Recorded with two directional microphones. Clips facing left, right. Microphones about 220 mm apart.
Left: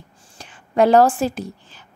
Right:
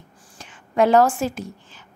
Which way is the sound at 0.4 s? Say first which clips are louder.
Left 2 dB; 35° left (ahead or behind).